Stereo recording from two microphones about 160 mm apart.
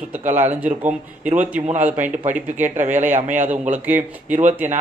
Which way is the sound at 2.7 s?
50° right (ahead or behind).